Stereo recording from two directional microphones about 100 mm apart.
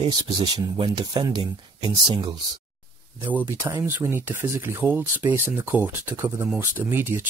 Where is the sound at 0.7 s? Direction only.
50° right (ahead or behind).